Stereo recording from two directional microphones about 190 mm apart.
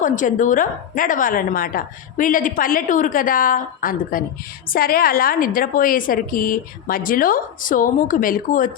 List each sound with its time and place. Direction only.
0.0 s a woman's voice: 45° left (ahead or behind)